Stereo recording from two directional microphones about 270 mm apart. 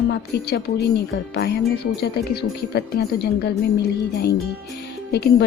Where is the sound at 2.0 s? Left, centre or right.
Left.